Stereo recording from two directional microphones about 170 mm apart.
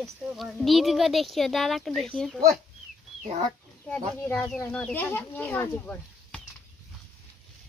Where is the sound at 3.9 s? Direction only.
5° left (ahead or behind).